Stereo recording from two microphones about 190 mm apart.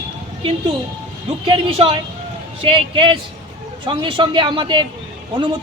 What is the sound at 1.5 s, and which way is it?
A woman's voice, 30° right (ahead or behind).